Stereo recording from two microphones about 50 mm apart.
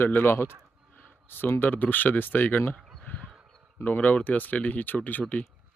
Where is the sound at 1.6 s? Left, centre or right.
Left.